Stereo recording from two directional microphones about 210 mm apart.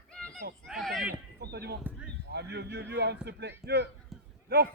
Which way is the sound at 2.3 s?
50° right (ahead or behind).